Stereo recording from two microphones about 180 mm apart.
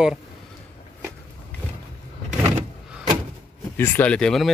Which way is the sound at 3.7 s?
10° left (ahead or behind).